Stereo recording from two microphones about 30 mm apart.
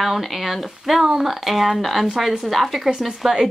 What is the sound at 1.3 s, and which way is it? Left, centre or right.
Speech, centre.